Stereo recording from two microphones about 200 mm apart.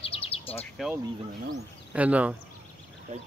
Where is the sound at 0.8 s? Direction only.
Centre (ahead or behind).